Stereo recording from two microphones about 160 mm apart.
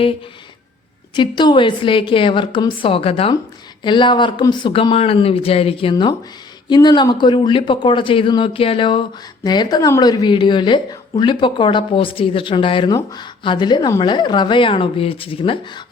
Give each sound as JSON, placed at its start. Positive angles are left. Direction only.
{"t": 1.1, "sound": "speech", "side_deg": 30}